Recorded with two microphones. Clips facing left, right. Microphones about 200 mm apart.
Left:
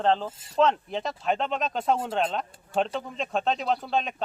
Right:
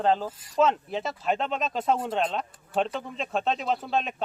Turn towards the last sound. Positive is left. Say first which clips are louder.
# even
turn(degrees=0)  # may be behind; listen again after turning